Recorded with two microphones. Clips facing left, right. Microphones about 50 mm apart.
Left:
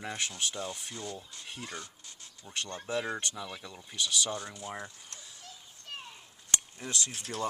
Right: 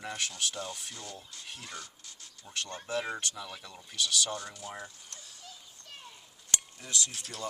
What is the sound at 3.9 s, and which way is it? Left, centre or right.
Speech, left.